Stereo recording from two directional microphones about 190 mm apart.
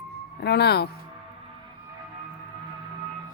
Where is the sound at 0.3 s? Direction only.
60° left (ahead or behind).